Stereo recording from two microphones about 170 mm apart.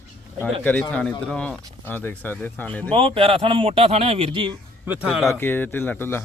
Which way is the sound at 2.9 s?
30° right (ahead or behind).